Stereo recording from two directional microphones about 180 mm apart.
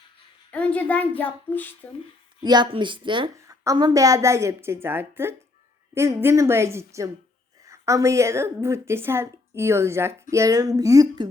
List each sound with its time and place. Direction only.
0.5 s a child's voice: 10° left (ahead or behind)
2.4 s a woman's voice: 25° right (ahead or behind)